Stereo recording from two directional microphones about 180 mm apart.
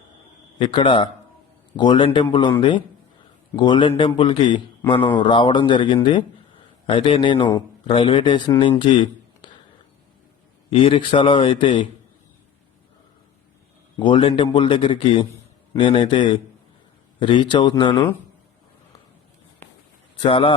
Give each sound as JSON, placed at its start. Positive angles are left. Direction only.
{"t": 0.6, "sound": "a man's voice", "side_deg": 25}
{"t": 10.7, "sound": "a man's voice", "side_deg": 30}
{"t": 13.9, "sound": "a man's voice", "side_deg": 25}
{"t": 20.2, "sound": "a man's voice", "side_deg": 30}